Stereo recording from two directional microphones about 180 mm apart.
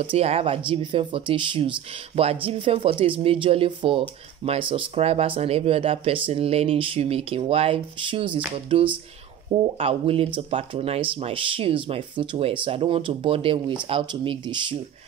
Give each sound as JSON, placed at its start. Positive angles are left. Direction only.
{"t": 0.0, "sound": "speech", "side_deg": -30}